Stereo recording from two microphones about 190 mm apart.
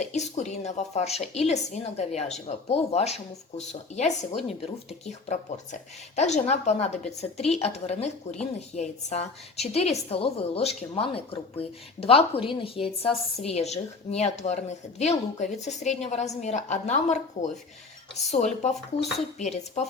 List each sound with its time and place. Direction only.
0.0 s a woman's voice: 35° left (ahead or behind)
6.1 s a woman's voice: 35° left (ahead or behind)